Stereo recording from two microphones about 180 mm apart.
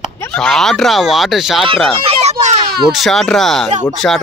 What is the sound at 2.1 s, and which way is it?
Speech, 35° right (ahead or behind).